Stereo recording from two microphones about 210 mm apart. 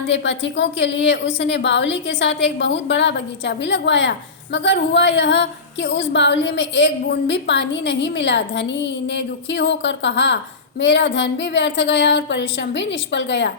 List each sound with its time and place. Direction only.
0.1 s a woman's voice: 60° left (ahead or behind)